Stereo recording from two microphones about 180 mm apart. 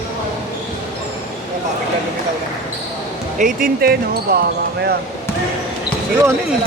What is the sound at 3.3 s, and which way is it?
Speech, 50° right (ahead or behind).